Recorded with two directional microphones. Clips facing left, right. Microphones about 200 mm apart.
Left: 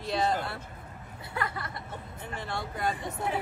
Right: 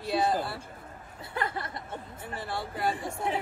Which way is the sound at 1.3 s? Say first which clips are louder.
Right 2 dB; 25° right (ahead or behind).